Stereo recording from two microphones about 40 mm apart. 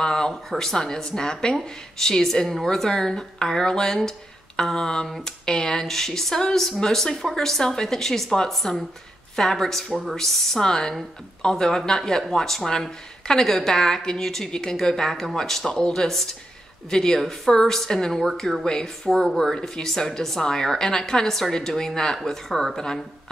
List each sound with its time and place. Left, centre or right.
0.0 s speech: centre
19.0 s speech: centre